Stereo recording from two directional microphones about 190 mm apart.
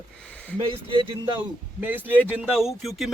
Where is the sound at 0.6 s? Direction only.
25° right (ahead or behind).